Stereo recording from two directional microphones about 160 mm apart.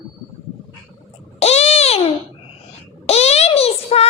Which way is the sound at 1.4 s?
40° left (ahead or behind).